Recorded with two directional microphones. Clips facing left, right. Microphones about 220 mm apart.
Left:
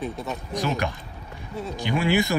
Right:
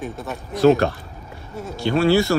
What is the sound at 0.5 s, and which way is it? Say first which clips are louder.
Speech: right 12 dB; 15° left (ahead or behind).